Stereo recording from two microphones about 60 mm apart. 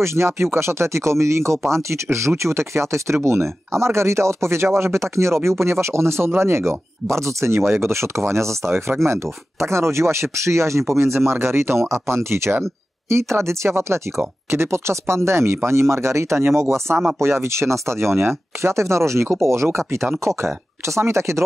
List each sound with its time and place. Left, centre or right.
0.0 s speech: right